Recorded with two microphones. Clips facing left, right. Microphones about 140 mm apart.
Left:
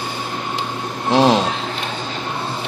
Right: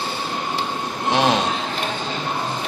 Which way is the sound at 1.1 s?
30° left (ahead or behind).